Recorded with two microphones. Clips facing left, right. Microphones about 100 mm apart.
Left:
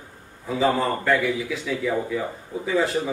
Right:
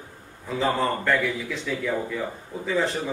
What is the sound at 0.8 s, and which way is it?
Speech, 5° left (ahead or behind).